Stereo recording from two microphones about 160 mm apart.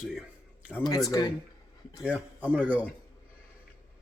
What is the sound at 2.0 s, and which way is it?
Speech, 10° right (ahead or behind).